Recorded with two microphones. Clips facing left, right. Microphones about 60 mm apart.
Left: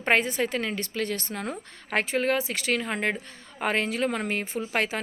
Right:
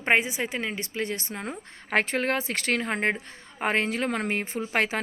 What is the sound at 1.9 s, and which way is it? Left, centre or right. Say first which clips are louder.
Speech: even; right.